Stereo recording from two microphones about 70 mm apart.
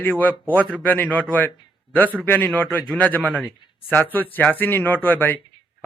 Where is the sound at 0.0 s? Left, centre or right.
Left.